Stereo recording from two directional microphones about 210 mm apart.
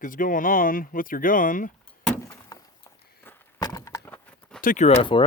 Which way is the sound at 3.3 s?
15° left (ahead or behind).